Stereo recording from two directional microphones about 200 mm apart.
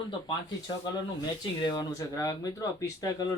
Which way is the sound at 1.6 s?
20° left (ahead or behind).